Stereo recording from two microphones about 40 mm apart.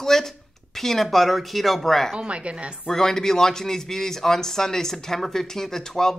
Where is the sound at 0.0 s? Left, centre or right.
Centre.